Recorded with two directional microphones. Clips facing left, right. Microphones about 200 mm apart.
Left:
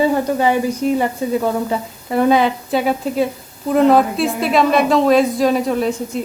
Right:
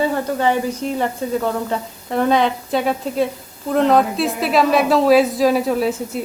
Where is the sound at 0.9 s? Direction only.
10° left (ahead or behind).